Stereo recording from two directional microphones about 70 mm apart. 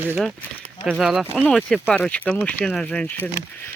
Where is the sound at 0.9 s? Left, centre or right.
Centre.